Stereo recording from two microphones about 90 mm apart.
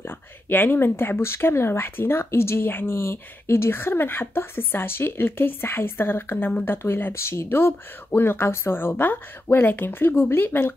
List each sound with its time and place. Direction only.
0.5 s a woman's voice: 20° left (ahead or behind)